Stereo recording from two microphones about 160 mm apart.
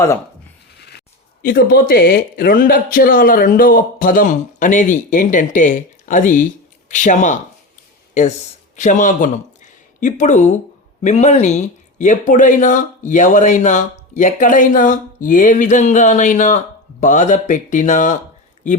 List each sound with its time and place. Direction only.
0.9 s speech: 80° left; by 7.3 s 50° left (ahead or behind)
8.7 s speech: 50° left (ahead or behind)